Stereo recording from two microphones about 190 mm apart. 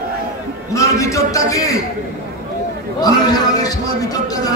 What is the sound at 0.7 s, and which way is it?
A man's voice, 15° left (ahead or behind).